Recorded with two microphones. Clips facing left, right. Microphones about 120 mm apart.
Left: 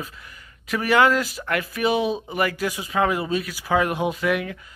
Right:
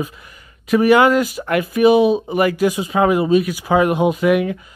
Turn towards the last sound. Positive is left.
turn(degrees=-20)  # may be behind; listen again after turning